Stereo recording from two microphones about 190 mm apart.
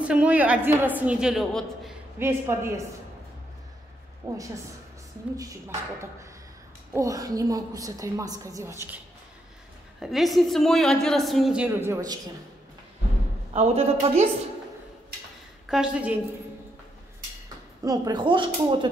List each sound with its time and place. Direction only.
0.0 s a woman's voice: 5° right (ahead or behind)
2.1 s a woman's voice: 10° right (ahead or behind)
4.2 s a woman's voice: 20° right (ahead or behind)
6.9 s a woman's voice: 15° right (ahead or behind)
9.9 s a woman's voice: centre (ahead or behind)
13.5 s a man's voice: 35° right (ahead or behind)
15.7 s a woman's voice: 5° right (ahead or behind)
17.8 s speech: 20° right (ahead or behind)